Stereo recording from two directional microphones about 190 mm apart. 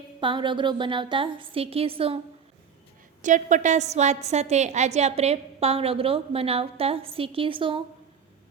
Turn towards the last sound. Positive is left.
turn(degrees=-25)  # may be behind; listen again after turning